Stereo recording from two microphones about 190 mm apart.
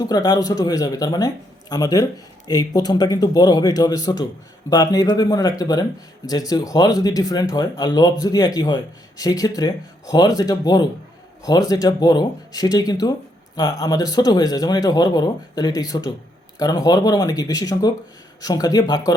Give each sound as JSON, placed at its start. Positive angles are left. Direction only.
{"t": 0.0, "sound": "speech", "side_deg": 20}